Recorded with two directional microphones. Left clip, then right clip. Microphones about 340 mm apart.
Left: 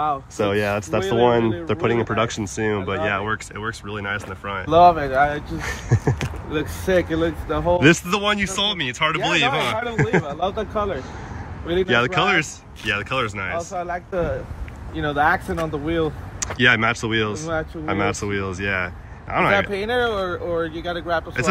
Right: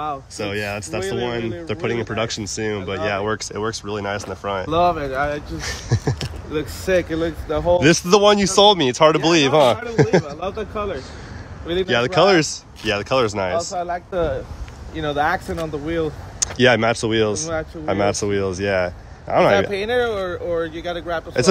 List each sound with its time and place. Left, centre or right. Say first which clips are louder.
0.0 s speech: left 4 dB; centre
13.7 s speech: right 2 dB; right
15.0 s speech: left 1 dB; centre